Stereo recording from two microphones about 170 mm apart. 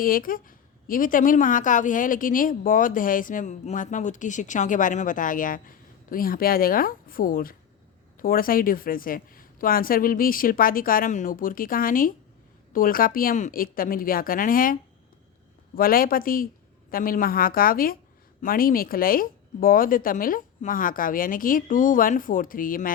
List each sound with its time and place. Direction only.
0.0 s a woman's voice: 55° left (ahead or behind)